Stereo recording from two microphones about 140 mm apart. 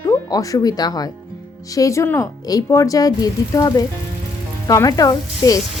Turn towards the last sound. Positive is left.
turn(degrees=25)  # may be behind; listen again after turning